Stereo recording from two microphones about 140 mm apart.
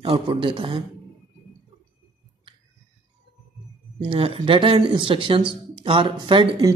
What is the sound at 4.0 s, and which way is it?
Speech, 40° right (ahead or behind).